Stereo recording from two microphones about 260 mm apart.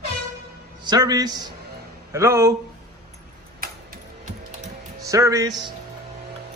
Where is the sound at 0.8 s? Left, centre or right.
Centre.